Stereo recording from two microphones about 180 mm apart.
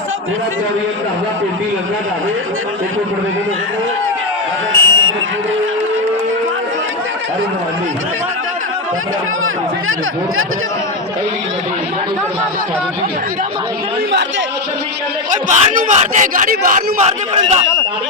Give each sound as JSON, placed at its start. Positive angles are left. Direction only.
{"t": 4.7, "sound": "buzzer", "side_deg": -90}
{"t": 15.4, "sound": "speech", "side_deg": -45}